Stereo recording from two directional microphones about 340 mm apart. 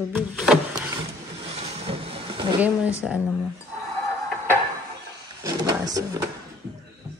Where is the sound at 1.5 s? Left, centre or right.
Centre.